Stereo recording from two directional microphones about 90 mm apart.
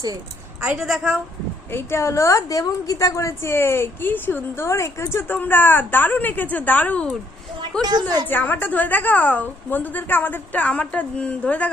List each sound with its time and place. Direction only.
0.6 s a woman's voice: 10° right (ahead or behind)
1.7 s a woman's voice: 30° left (ahead or behind); by 7.2 s 10° left (ahead or behind)
7.8 s a woman's voice: 50° right (ahead or behind)
8.3 s a woman's voice: 20° left (ahead or behind)